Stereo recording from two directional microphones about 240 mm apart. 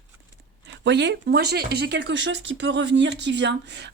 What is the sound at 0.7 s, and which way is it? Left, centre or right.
Speech, right.